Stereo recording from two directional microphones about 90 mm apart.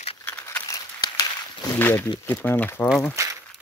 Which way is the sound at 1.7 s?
25° left (ahead or behind).